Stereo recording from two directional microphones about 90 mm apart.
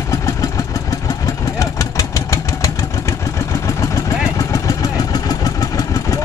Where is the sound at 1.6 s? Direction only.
40° left (ahead or behind).